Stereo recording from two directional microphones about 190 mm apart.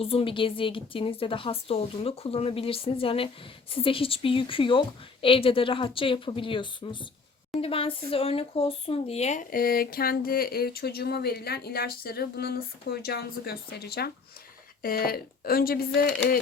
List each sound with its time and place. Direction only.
0.0 s a woman's voice: 30° left (ahead or behind); by 16.4 s 50° left (ahead or behind)